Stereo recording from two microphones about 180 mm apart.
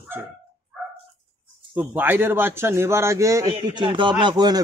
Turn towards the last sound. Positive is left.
turn(degrees=-20)  # may be behind; listen again after turning